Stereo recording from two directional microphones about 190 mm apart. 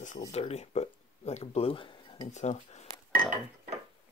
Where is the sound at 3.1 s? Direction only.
45° right (ahead or behind).